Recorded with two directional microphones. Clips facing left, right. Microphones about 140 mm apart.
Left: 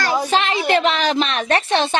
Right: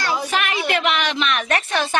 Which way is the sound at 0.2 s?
30° left (ahead or behind).